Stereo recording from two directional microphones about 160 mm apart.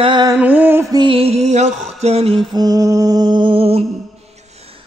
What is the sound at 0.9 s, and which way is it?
Mantra, 35° right (ahead or behind).